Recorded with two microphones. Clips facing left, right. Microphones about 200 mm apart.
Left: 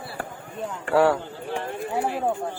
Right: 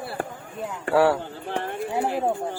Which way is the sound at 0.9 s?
5° right (ahead or behind).